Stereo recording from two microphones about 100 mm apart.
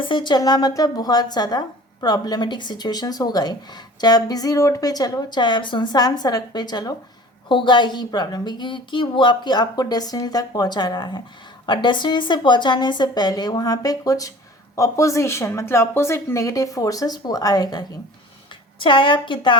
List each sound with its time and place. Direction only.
0.0 s a woman's voice: 55° left (ahead or behind)
18.8 s a woman's voice: 55° left (ahead or behind)